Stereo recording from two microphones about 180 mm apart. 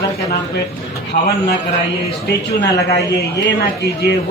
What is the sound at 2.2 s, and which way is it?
A woman's voice, 70° left (ahead or behind).